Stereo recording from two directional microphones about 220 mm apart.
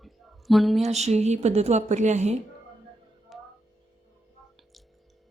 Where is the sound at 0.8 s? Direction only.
30° right (ahead or behind).